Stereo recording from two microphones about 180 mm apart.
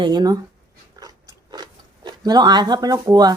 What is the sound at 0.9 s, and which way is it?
Chewing, 20° right (ahead or behind).